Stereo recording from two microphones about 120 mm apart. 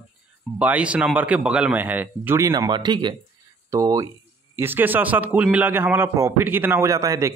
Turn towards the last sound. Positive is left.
turn(degrees=-25)  # may be behind; listen again after turning